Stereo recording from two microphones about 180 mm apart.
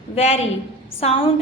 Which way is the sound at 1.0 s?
35° left (ahead or behind).